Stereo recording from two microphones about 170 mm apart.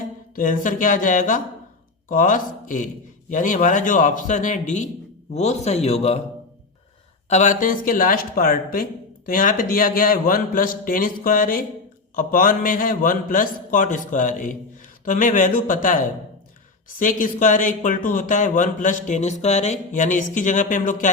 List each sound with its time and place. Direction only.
0.3 s a man's voice: 50° left (ahead or behind)
7.3 s speech: 45° left (ahead or behind)
17.0 s speech: 50° left (ahead or behind)